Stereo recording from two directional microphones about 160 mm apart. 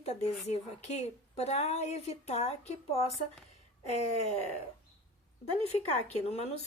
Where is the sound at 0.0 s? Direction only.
40° left (ahead or behind).